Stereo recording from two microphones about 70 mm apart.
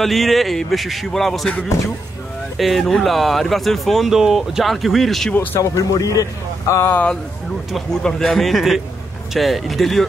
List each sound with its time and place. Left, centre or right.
0.0 s speech: centre
2.5 s speech: centre
5.3 s speech: left
5.6 s speech: left
6.7 s speech: left
7.7 s speech: centre